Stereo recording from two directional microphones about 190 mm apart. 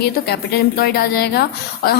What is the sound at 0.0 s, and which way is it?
A woman's voice, 55° left (ahead or behind).